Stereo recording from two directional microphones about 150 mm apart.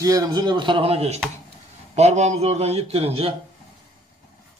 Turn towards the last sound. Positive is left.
turn(degrees=-40)  # may be behind; listen again after turning